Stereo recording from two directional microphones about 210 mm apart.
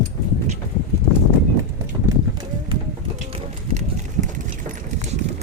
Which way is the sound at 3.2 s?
30° right (ahead or behind).